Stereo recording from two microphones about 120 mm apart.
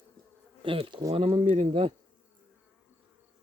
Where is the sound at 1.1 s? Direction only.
50° right (ahead or behind).